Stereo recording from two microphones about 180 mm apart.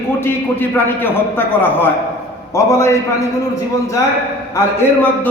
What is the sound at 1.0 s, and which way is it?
A man's voice, 10° left (ahead or behind).